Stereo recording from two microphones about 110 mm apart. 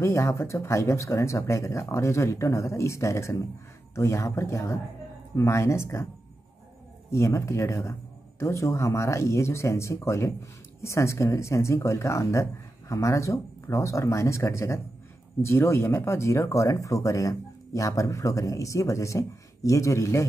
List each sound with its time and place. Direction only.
0.0 s speech: 25° left (ahead or behind)
7.1 s speech: 25° left (ahead or behind)